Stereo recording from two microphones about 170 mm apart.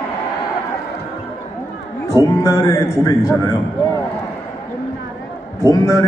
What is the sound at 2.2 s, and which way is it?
A man's voice, 20° left (ahead or behind).